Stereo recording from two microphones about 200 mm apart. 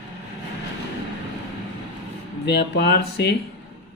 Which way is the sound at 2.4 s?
55° left (ahead or behind).